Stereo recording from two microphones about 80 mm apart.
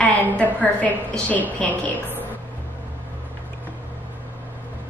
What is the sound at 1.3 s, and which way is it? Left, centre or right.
Speech, left.